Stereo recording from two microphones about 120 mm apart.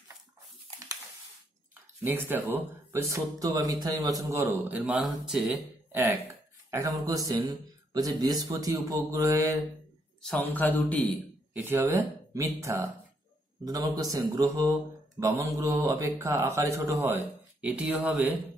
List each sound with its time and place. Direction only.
2.1 s speech: 15° right (ahead or behind)
5.0 s speech: centre (ahead or behind)
5.9 s a sound: 20° right (ahead or behind)
6.7 s speech: 30° right (ahead or behind)
10.2 s a man's voice: 10° left (ahead or behind)
11.5 s speech: 20° right (ahead or behind)